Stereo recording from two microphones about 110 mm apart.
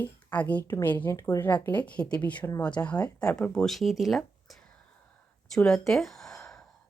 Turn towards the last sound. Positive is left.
turn(degrees=5)  # may be behind; listen again after turning